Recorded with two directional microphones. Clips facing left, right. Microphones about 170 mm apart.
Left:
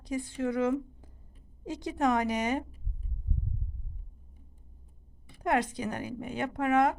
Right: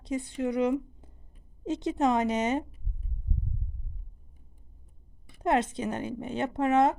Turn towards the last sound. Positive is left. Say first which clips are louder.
# right 2 dB
turn(degrees=-25)  # may be behind; listen again after turning